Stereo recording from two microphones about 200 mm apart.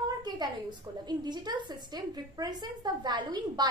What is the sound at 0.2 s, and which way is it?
A woman's voice, 20° right (ahead or behind).